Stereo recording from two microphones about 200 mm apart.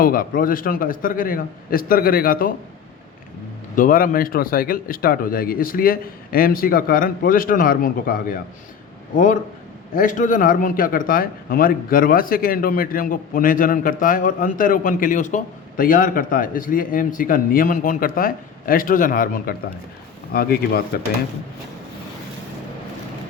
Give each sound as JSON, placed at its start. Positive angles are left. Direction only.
{"t": 0.0, "sound": "a man's voice", "side_deg": 45}
{"t": 3.8, "sound": "a man's voice", "side_deg": 45}